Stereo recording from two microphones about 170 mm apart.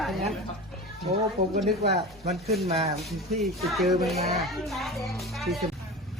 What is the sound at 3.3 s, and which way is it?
A man's voice, centre (ahead or behind).